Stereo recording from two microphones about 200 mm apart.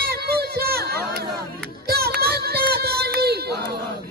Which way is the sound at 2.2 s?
50° right (ahead or behind).